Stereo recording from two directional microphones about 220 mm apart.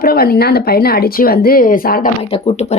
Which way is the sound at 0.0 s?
45° left (ahead or behind).